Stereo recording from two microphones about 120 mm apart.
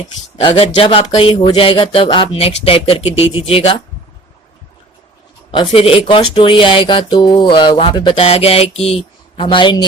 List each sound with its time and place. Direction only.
0.5 s speech: 50° left (ahead or behind)
5.5 s speech: 45° left (ahead or behind)